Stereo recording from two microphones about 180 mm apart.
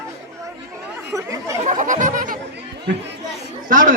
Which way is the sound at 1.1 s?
15° right (ahead or behind).